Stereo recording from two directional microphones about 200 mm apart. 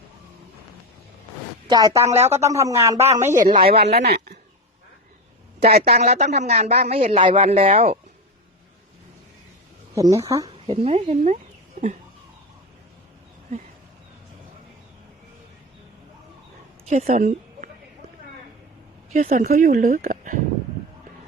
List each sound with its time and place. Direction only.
1.6 s a woman's voice: 20° right (ahead or behind)
3.7 s speech: 50° right (ahead or behind)
5.6 s speech: 50° right (ahead or behind)
6.0 s speech: 35° right (ahead or behind)
9.9 s speech: 15° right (ahead or behind)
10.7 s speech: 30° right (ahead or behind)
16.9 s a woman's voice: 35° right (ahead or behind)
19.1 s speech: 40° right (ahead or behind)